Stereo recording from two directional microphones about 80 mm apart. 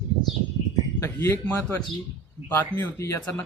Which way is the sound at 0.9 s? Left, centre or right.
Left.